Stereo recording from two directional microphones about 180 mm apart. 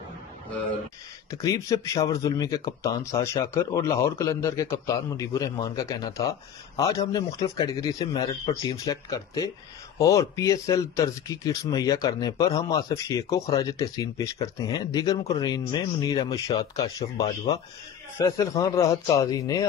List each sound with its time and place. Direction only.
1.3 s speech: 20° left (ahead or behind)